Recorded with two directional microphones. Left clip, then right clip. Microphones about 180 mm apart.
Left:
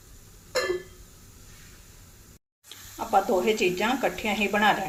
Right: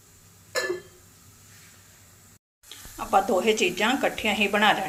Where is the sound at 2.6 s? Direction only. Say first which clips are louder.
Right 1 dB; centre (ahead or behind).